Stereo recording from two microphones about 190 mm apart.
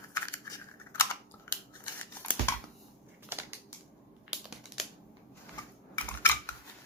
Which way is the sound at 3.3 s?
10° right (ahead or behind).